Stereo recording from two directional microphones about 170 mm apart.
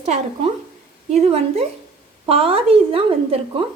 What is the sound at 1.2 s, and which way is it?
A woman's voice, 35° right (ahead or behind).